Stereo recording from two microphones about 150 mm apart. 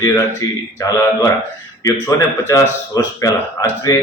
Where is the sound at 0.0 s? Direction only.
20° left (ahead or behind).